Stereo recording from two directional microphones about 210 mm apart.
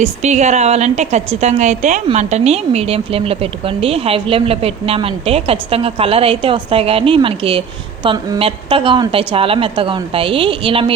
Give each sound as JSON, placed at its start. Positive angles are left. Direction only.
{"t": 0.0, "sound": "a woman's voice", "side_deg": -35}